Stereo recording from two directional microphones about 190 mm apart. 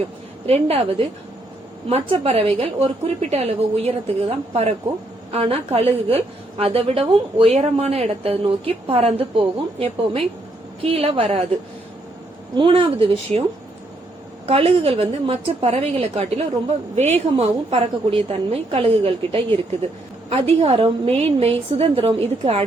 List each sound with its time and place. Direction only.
0.4 s a woman's voice: 30° right (ahead or behind)
12.5 s speech: 25° right (ahead or behind)
14.4 s a woman's voice: 30° right (ahead or behind)